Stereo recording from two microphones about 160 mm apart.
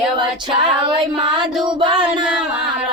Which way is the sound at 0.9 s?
30° right (ahead or behind).